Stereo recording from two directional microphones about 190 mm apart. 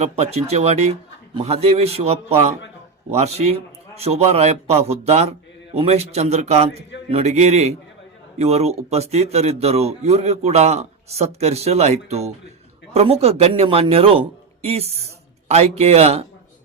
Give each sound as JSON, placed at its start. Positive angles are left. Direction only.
{"t": 0.0, "sound": "speech", "side_deg": -35}